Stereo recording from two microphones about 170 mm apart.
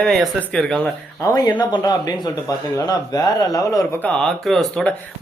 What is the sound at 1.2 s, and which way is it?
Speech, 20° left (ahead or behind).